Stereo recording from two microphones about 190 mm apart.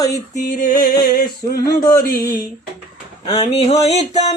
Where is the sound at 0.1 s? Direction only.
45° left (ahead or behind).